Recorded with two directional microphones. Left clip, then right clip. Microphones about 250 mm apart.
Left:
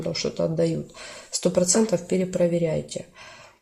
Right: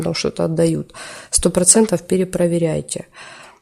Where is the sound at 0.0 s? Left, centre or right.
Right.